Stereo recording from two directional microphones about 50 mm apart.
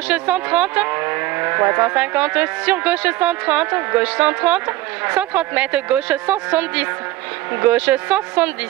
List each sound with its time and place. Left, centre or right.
0.1 s speech: right
2.0 s speech: right